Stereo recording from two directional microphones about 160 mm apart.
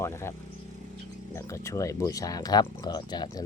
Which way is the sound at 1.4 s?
20° left (ahead or behind).